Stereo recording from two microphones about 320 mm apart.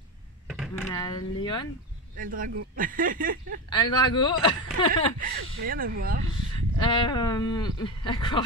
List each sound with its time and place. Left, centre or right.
0.5 s computer keyboard: centre
0.9 s speech: centre
2.1 s speech: right
3.7 s speech: centre
5.2 s speech: right
6.8 s speech: centre